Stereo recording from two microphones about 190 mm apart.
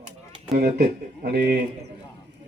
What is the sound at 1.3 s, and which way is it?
Speech, 55° right (ahead or behind).